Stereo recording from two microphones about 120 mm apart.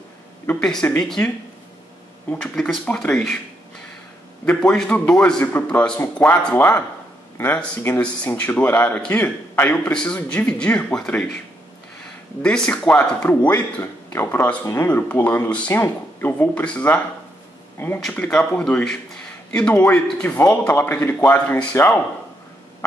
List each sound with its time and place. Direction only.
0.5 s a man's voice: 5° left (ahead or behind)
2.4 s a man's voice: 5° left (ahead or behind)
4.5 s a man's voice: 5° left (ahead or behind)
12.4 s a man's voice: 5° left (ahead or behind)